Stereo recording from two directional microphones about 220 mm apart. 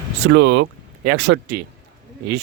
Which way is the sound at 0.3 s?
50° right (ahead or behind).